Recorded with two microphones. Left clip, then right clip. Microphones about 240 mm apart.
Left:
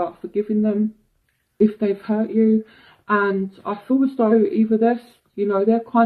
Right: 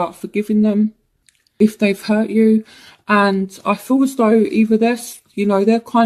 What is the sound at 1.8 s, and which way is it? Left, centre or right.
Speech, right.